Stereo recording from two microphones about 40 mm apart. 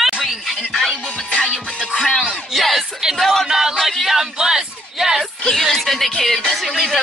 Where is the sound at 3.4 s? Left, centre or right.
Centre.